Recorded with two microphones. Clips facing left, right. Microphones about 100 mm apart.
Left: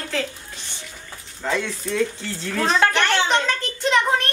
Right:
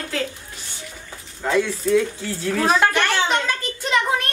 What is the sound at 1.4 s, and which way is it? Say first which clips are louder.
A woman's voice: right 5 dB; 5° right (ahead or behind).